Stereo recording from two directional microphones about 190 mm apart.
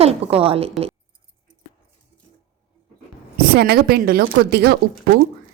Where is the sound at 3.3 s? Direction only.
55° right (ahead or behind).